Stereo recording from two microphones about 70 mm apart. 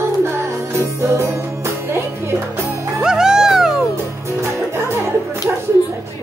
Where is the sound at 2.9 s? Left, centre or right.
Centre.